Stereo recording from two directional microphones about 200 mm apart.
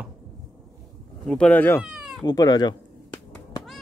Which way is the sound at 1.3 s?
5° left (ahead or behind).